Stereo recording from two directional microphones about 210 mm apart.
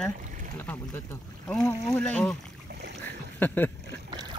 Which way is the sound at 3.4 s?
10° left (ahead or behind).